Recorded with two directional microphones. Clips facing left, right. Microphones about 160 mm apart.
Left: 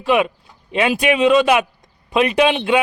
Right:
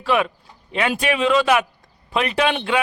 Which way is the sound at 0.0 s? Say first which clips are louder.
Left 3 dB; 20° left (ahead or behind).